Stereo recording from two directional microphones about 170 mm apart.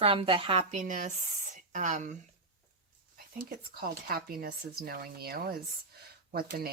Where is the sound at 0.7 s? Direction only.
50° right (ahead or behind).